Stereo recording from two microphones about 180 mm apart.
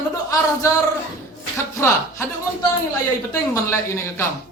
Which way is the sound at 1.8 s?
15° left (ahead or behind).